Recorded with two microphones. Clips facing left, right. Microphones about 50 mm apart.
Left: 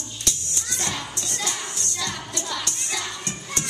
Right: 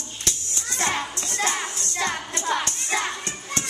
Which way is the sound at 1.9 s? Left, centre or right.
Right.